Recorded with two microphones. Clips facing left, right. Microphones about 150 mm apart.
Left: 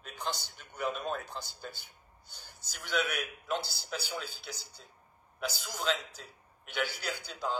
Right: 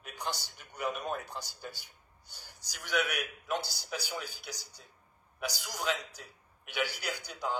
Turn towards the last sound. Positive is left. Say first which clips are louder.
# even
turn(degrees=-15)  # may be behind; listen again after turning